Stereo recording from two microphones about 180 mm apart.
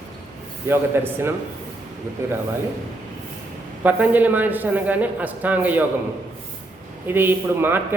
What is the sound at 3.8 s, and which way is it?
A man's voice, 10° right (ahead or behind).